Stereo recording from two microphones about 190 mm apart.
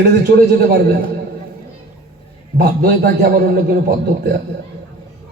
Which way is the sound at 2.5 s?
55° right (ahead or behind).